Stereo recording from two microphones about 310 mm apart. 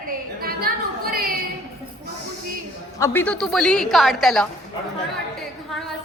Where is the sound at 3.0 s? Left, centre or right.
Centre.